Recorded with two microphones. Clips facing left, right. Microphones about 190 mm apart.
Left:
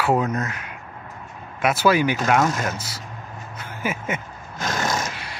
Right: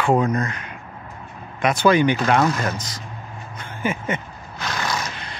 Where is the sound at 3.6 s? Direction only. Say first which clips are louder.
Right 3 dB; 5° left (ahead or behind).